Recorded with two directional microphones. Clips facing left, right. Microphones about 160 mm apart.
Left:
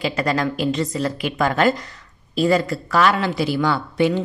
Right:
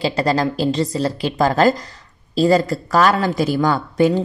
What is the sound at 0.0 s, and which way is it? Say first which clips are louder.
Speech: right 3 dB; 30° right (ahead or behind).